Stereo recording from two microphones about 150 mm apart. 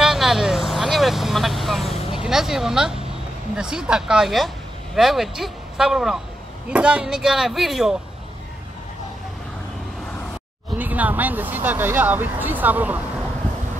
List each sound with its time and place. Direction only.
0.0 s vehicle: centre (ahead or behind)
2.0 s vehicle: 35° left (ahead or behind)
2.2 s speech: 5° right (ahead or behind)
10.8 s speech: 10° right (ahead or behind)